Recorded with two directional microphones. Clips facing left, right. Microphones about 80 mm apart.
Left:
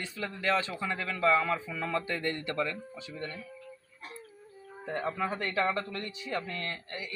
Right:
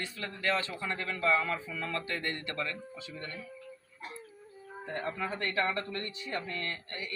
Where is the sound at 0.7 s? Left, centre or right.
Centre.